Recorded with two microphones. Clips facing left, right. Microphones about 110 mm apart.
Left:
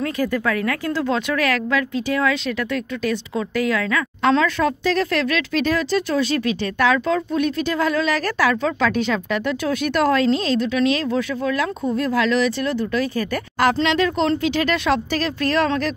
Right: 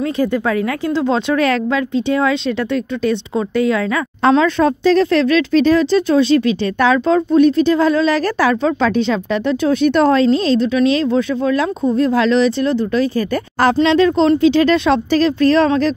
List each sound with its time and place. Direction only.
0.0 s speech: 25° right (ahead or behind)